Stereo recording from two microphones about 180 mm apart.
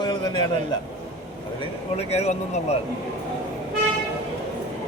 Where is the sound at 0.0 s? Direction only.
25° left (ahead or behind).